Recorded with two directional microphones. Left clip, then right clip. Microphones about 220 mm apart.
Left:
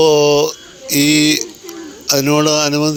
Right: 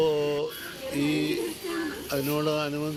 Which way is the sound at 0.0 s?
55° left (ahead or behind).